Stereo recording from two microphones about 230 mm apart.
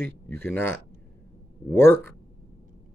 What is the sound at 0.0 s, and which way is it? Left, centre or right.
Speech, centre.